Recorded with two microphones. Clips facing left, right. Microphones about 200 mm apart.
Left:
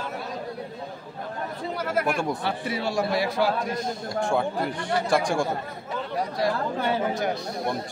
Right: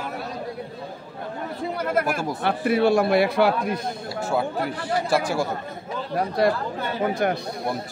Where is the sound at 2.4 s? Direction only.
55° right (ahead or behind).